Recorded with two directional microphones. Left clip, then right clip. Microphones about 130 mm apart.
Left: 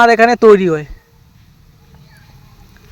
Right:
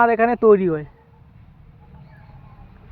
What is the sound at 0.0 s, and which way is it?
Speech, 50° left (ahead or behind).